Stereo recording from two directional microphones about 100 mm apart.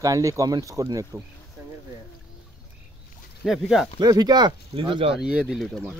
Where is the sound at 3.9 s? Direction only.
45° right (ahead or behind); by 5.1 s 60° right (ahead or behind).